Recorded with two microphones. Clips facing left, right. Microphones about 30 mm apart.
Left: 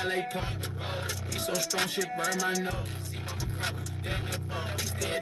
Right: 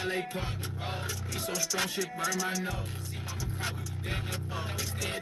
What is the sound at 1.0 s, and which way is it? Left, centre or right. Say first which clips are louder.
Music: left 2 dB; left.